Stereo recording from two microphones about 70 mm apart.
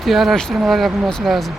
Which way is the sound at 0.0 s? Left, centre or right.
Centre.